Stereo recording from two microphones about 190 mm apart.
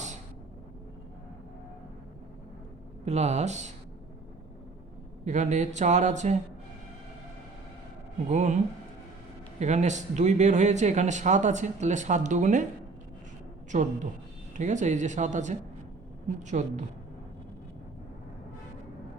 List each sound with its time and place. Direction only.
3.0 s speech: 35° right (ahead or behind)
5.2 s speech: 40° right (ahead or behind)
8.3 s speech: 40° right (ahead or behind)
9.6 s speech: 40° right (ahead or behind)
13.7 s a woman's voice: 40° right (ahead or behind)